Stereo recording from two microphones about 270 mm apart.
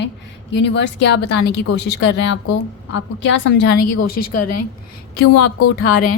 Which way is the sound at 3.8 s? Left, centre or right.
Left.